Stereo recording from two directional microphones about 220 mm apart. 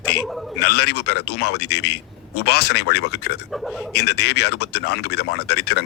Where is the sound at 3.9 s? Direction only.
45° left (ahead or behind).